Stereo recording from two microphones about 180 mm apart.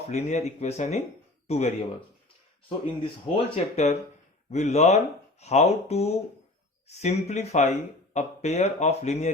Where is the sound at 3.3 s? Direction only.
35° left (ahead or behind).